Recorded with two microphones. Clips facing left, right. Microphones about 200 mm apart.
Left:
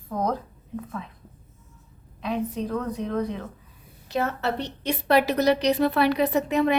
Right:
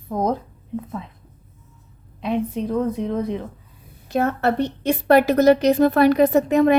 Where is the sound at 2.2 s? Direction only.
25° right (ahead or behind).